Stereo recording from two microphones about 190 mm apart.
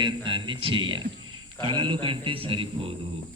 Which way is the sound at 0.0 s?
25° right (ahead or behind).